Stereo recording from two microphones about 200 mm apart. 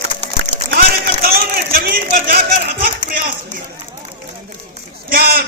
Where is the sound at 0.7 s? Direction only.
50° right (ahead or behind).